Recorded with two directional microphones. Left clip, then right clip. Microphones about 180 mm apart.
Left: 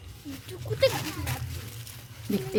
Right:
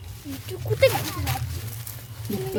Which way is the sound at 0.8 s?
25° right (ahead or behind).